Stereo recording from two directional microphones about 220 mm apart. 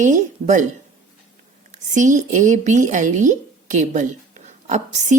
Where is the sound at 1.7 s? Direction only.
35° right (ahead or behind).